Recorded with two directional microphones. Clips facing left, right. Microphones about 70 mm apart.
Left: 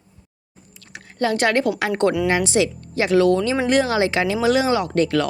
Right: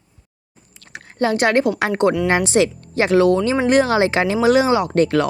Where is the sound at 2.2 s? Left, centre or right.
Right.